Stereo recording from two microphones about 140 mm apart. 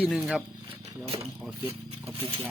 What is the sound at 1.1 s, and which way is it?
Speech, 35° right (ahead or behind).